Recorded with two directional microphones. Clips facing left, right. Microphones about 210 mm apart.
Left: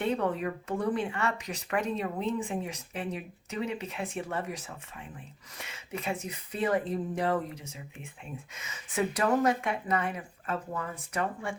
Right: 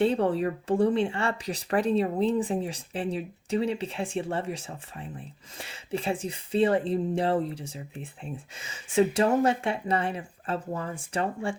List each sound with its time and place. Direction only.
0.0 s speech: 30° right (ahead or behind)